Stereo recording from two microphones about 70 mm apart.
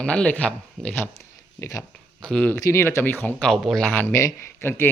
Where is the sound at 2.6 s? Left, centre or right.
Left.